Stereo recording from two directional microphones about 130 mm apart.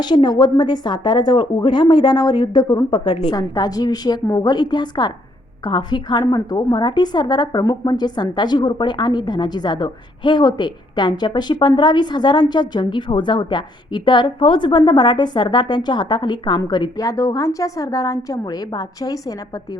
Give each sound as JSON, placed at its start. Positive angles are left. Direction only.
{"t": 0.0, "sound": "a woman's voice", "side_deg": 35}